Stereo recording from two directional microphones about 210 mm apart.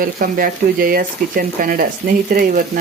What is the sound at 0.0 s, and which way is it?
Speech, 40° right (ahead or behind).